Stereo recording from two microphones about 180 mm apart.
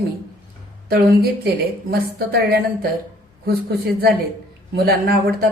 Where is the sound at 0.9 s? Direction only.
60° right (ahead or behind).